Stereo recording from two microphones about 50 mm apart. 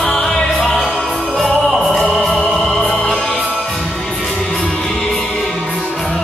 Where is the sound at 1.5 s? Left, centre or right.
Left.